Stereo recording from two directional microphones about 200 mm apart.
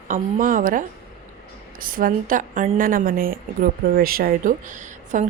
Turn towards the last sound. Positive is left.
turn(degrees=-40)  # may be behind; listen again after turning